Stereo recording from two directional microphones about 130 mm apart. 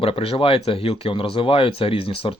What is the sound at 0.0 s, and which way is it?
Speech, 45° left (ahead or behind).